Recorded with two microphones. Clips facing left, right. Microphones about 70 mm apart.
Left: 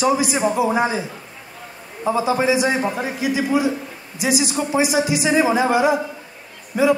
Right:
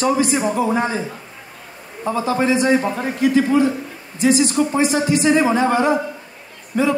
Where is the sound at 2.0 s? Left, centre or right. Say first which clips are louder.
Left 1 dB; centre.